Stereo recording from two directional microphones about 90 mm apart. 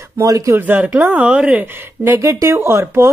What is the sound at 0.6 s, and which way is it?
Speech, 20° right (ahead or behind).